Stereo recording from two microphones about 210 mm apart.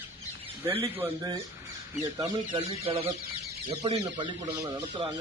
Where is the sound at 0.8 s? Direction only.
15° right (ahead or behind).